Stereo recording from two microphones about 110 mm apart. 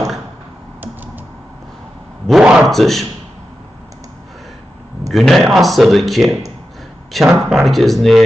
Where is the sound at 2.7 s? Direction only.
Centre (ahead or behind).